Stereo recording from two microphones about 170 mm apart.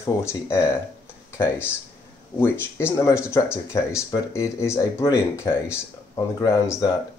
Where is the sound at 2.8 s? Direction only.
15° left (ahead or behind).